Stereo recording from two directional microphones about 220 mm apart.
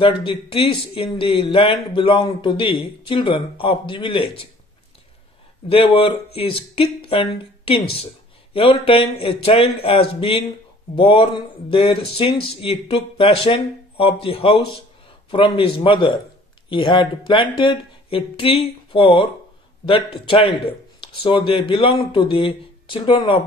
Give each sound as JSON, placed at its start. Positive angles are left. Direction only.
{"t": 0.0, "sound": "a man's voice", "side_deg": 25}
{"t": 5.7, "sound": "a man's voice", "side_deg": 20}